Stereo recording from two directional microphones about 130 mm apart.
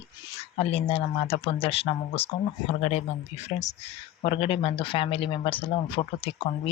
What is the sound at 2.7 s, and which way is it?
Speech, 60° left (ahead or behind).